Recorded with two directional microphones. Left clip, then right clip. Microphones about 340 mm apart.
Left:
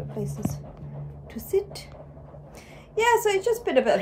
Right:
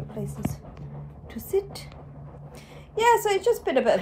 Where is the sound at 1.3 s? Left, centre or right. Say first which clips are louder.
Left 1 dB; centre.